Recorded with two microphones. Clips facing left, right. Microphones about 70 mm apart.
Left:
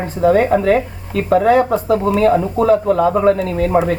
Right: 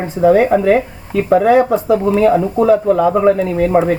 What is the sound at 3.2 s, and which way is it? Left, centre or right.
Speech, centre.